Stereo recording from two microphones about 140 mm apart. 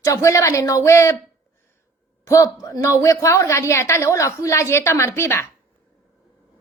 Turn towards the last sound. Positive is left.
turn(degrees=15)  # may be behind; listen again after turning